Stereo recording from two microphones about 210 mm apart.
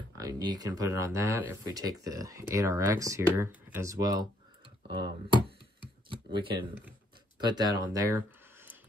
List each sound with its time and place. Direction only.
0.2 s speech: 20° right (ahead or behind)